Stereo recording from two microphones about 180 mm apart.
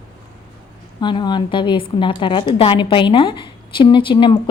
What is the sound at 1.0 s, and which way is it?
A woman's voice, 25° left (ahead or behind).